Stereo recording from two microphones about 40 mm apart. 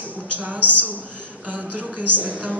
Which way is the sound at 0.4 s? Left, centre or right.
Right.